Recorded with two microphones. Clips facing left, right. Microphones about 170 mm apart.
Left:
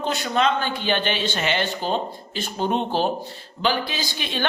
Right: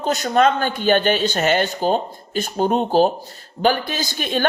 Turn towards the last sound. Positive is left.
turn(degrees=-45)  # may be behind; listen again after turning